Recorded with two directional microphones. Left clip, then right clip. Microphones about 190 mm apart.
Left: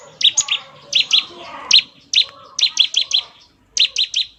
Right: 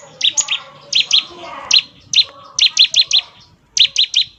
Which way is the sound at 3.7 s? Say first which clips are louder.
Right 4 dB; 20° right (ahead or behind).